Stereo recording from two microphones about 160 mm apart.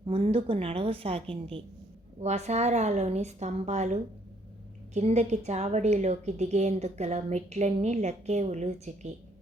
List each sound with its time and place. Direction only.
0.0 s a woman's voice: 35° right (ahead or behind)